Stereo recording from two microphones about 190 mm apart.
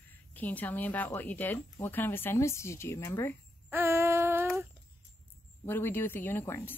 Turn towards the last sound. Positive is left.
turn(degrees=10)  # may be behind; listen again after turning